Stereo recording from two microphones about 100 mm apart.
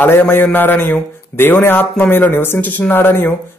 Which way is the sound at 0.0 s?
20° left (ahead or behind).